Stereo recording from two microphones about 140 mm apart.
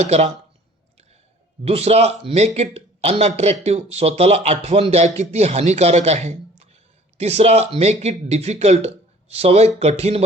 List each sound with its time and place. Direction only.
0.0 s speech: 50° right (ahead or behind)
1.6 s speech: 45° right (ahead or behind)